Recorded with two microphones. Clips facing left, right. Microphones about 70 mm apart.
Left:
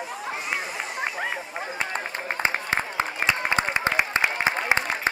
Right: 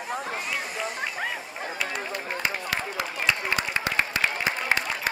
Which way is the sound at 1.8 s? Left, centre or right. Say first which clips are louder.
Left 1 dB; left.